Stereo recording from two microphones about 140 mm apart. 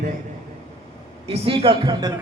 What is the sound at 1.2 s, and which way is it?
Speech, 40° right (ahead or behind).